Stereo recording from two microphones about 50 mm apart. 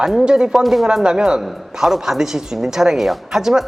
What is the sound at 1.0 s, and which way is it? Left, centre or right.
A man's voice, centre.